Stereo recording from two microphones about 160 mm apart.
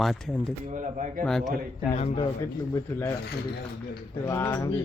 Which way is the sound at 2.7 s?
20° left (ahead or behind).